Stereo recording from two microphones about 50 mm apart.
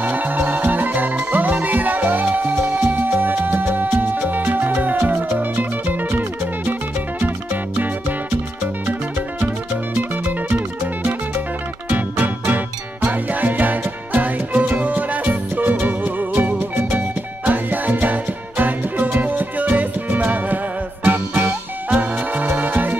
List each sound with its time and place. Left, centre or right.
0.0 s music: right
12.2 s music: right